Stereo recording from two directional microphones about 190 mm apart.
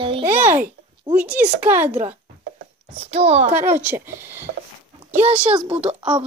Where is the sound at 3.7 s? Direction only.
10° right (ahead or behind).